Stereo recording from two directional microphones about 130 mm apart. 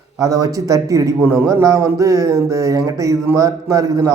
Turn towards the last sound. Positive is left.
turn(degrees=-25)  # may be behind; listen again after turning